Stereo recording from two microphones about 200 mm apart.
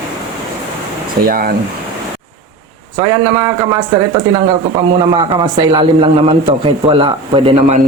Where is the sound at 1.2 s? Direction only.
50° right (ahead or behind).